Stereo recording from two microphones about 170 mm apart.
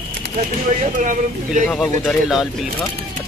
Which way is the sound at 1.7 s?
Centre (ahead or behind).